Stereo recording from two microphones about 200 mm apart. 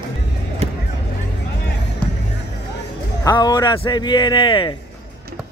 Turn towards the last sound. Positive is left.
turn(degrees=25)  # may be behind; listen again after turning